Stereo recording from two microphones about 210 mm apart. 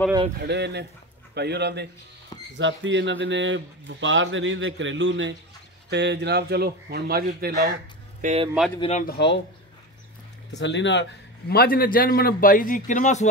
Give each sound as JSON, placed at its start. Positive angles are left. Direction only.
{"t": 0.4, "sound": "a man's voice", "side_deg": -55}
{"t": 8.2, "sound": "speech", "side_deg": -30}
{"t": 8.7, "sound": "speech", "side_deg": 25}
{"t": 9.0, "sound": "a man's voice", "side_deg": 50}
{"t": 10.6, "sound": "a man's voice", "side_deg": 60}